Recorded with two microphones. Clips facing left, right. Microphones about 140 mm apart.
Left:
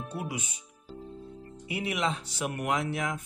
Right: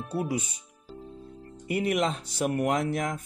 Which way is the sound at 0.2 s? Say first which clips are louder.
Right 9 dB; 35° right (ahead or behind).